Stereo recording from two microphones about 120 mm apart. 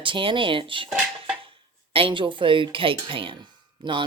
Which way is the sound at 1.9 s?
50° right (ahead or behind).